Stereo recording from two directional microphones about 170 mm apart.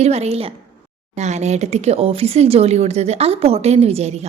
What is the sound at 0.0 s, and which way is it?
A woman's voice, 40° right (ahead or behind).